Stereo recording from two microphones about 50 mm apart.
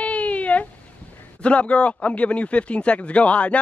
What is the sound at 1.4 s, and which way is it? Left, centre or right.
Speech, left.